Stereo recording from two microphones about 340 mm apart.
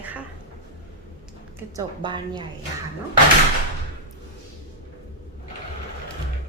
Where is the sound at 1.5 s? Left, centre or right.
Centre.